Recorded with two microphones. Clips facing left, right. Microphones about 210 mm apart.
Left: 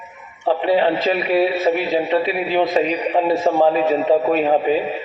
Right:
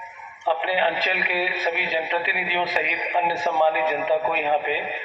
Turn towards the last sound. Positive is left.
turn(degrees=45)  # may be behind; listen again after turning